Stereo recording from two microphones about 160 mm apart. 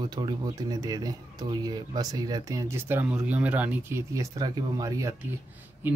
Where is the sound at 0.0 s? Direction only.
25° right (ahead or behind).